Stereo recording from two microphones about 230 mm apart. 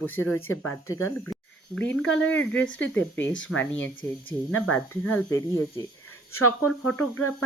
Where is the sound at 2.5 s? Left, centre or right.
Left.